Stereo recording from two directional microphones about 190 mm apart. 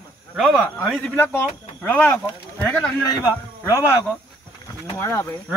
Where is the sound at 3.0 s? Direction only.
15° left (ahead or behind).